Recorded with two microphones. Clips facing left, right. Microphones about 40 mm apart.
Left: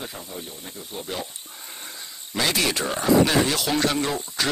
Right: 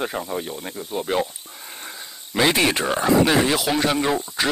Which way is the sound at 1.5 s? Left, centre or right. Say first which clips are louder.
Right 3 dB; centre.